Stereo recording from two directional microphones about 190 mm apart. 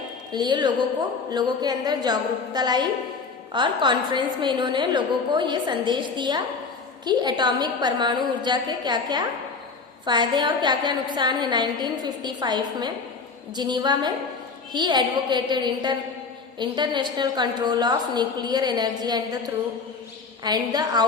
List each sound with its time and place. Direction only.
0.3 s a woman's voice: 25° right (ahead or behind)
20.4 s a woman's voice: 20° right (ahead or behind)